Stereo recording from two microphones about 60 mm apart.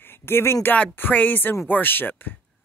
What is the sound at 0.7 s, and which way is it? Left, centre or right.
A woman's voice, left.